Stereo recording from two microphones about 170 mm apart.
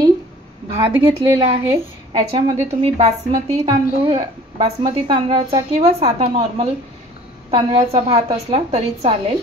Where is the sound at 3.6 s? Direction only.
30° right (ahead or behind).